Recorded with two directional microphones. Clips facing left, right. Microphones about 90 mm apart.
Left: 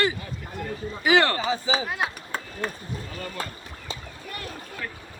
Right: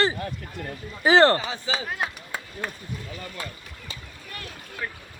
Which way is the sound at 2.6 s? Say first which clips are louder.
Left 2 dB; 35° left (ahead or behind).